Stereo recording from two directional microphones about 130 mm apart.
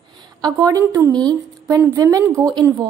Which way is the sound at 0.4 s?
30° right (ahead or behind).